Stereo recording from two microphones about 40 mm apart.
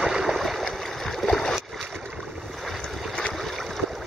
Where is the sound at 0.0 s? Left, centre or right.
Centre.